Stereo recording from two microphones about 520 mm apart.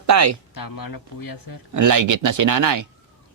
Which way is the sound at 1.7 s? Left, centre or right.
Right.